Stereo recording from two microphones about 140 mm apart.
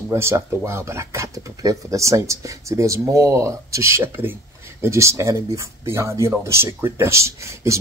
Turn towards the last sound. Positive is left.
turn(degrees=-20)  # may be behind; listen again after turning